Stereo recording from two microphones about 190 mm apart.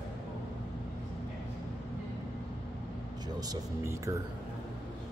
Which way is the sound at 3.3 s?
20° right (ahead or behind).